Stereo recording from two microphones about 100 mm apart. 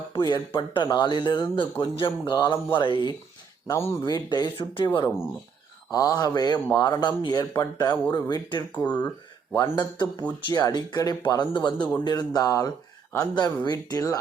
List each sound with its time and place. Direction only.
0.1 s speech: 45° left (ahead or behind)
3.7 s speech: 30° left (ahead or behind)
4.0 s speech: 45° left (ahead or behind)
4.5 s speech: 60° left (ahead or behind)
5.9 s speech: 35° left (ahead or behind); by 7.6 s 50° left (ahead or behind)
7.6 s speech: 35° left (ahead or behind)
8.1 s speech: 45° left (ahead or behind)
11.8 s speech: 15° left (ahead or behind)
12.0 s speech: 40° left (ahead or behind)